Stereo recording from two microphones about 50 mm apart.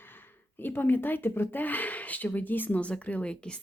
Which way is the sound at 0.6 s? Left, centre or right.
Left.